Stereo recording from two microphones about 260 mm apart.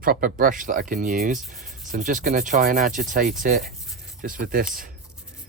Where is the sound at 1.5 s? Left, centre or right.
Right.